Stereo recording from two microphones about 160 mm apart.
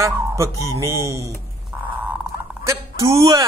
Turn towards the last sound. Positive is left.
turn(degrees=-20)  # may be behind; listen again after turning